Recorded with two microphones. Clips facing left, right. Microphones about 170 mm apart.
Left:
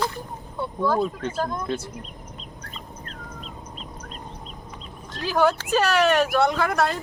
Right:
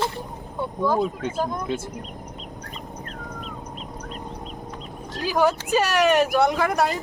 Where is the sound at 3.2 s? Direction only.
60° right (ahead or behind).